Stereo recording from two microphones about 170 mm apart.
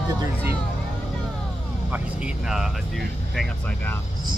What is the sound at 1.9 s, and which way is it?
Speech, 5° right (ahead or behind).